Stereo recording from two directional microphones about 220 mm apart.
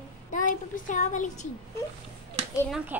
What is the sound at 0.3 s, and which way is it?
Speech, 35° left (ahead or behind).